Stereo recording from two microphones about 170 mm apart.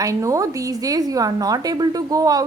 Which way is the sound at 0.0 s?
20° right (ahead or behind).